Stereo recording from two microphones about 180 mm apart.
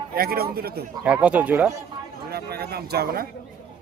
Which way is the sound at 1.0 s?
5° right (ahead or behind).